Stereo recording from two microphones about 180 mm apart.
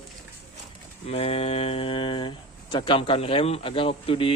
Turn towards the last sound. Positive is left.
turn(degrees=30)  # may be behind; listen again after turning